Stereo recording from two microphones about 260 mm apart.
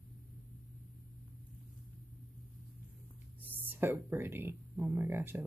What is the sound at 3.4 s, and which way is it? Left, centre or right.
Speech, centre.